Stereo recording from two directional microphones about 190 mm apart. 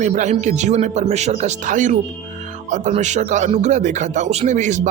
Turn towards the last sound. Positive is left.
turn(degrees=-40)  # may be behind; listen again after turning